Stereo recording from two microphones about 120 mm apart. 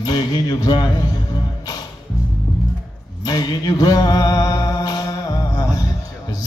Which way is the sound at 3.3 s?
35° left (ahead or behind).